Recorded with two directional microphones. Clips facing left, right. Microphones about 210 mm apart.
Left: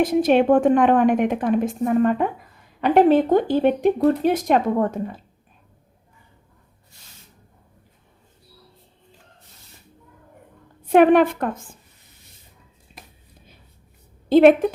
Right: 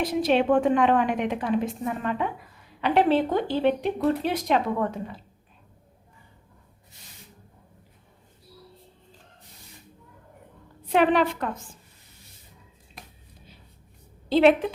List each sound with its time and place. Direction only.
0.0 s a woman's voice: 50° left (ahead or behind)
10.8 s a woman's voice: 50° left (ahead or behind)
13.0 s a sound: centre (ahead or behind)
14.3 s a woman's voice: 50° left (ahead or behind)